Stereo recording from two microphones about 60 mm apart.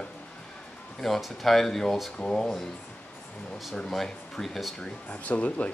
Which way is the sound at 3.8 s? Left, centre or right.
Centre.